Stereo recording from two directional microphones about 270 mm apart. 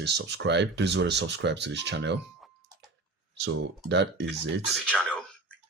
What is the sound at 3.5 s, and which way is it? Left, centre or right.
Speech, right.